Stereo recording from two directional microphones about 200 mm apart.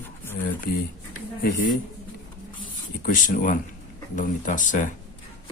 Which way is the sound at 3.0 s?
45° left (ahead or behind).